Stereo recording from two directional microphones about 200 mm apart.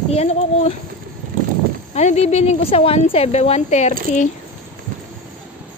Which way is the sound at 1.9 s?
35° left (ahead or behind).